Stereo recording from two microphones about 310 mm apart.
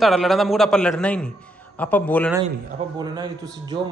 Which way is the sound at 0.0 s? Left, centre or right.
Centre.